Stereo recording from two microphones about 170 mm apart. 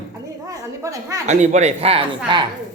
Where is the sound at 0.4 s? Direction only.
20° right (ahead or behind).